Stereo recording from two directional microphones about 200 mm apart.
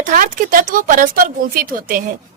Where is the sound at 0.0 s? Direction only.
40° right (ahead or behind).